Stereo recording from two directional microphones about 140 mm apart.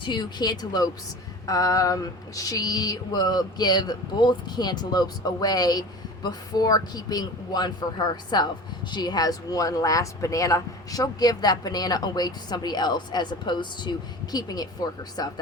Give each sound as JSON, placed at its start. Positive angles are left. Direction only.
{"t": 0.0, "sound": "speech", "side_deg": 30}